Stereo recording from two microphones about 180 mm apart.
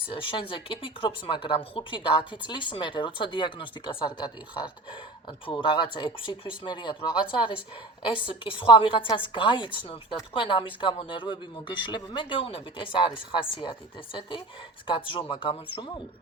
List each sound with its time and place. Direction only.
0.1 s speech: 30° left (ahead or behind)
5.5 s speech: 25° left (ahead or behind)